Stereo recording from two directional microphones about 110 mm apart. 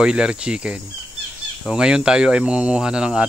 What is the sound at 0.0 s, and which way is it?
Speech, 10° right (ahead or behind).